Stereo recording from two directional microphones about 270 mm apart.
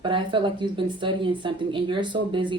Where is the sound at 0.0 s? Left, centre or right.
Centre.